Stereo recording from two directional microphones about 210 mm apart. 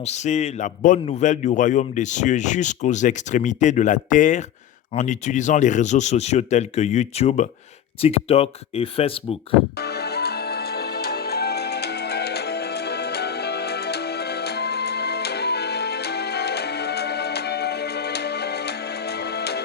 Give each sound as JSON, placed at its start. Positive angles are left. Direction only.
{"t": 0.0, "sound": "a man's voice", "side_deg": 35}
{"t": 9.8, "sound": "music", "side_deg": 50}